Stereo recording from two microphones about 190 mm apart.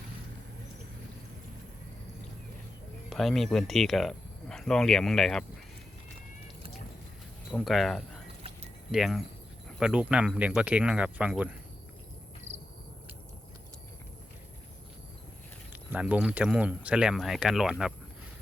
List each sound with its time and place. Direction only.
3.1 s speech: centre (ahead or behind)
7.5 s speech: centre (ahead or behind)
12.5 s cricket: 35° right (ahead or behind)
15.7 s speech: 10° right (ahead or behind)